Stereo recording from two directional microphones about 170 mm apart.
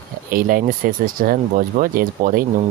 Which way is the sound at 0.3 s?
55° right (ahead or behind).